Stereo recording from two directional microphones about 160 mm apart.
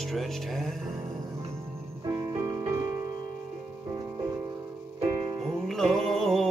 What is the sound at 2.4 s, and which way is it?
Music, 20° right (ahead or behind).